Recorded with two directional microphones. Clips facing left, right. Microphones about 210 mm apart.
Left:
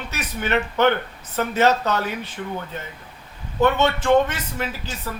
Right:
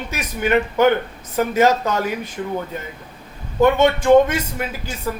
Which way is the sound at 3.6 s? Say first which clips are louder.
Right 4 dB; 15° right (ahead or behind).